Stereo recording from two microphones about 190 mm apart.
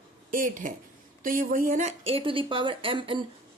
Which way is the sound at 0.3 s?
45° right (ahead or behind).